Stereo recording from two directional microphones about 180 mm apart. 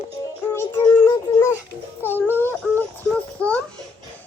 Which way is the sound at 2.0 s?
10° left (ahead or behind).